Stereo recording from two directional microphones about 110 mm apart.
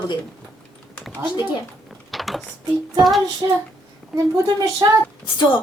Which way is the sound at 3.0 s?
Centre (ahead or behind).